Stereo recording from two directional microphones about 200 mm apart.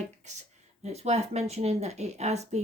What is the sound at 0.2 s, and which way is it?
Speech, 35° right (ahead or behind).